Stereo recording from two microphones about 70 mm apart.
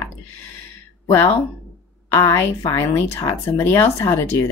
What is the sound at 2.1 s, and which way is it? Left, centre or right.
A woman's voice, left.